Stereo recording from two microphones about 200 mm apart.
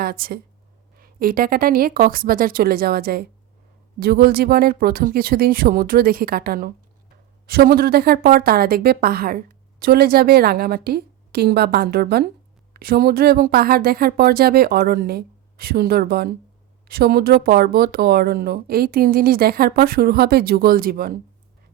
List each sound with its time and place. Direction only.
0.0 s speech: 50° right (ahead or behind)